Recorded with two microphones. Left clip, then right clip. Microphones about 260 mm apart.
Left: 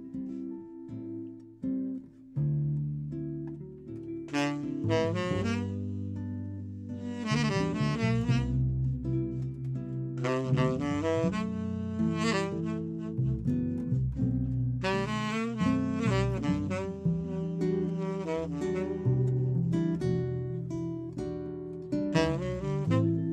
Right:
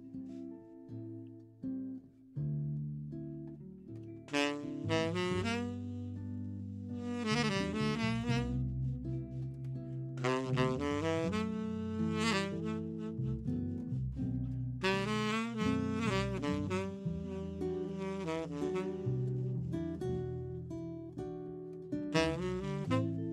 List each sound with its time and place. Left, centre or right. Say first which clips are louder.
4.3 s saxophone: left 2 dB; right
7.1 s music: left 2 dB; right
10.2 s music: left 3 dB; right
19.7 s music: left 7 dB; centre
22.1 s music: left 2 dB; right